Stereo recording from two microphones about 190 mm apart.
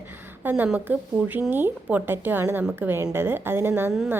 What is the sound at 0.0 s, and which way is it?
Speech, 10° right (ahead or behind).